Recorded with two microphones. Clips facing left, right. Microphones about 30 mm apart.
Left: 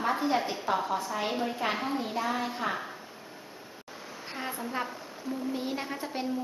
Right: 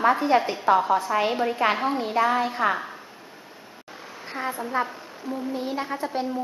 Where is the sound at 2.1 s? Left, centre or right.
Right.